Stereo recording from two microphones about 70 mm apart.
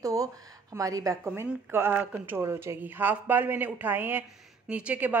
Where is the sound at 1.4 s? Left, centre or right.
Right.